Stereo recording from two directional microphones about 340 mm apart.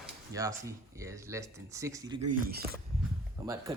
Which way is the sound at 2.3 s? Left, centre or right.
Right.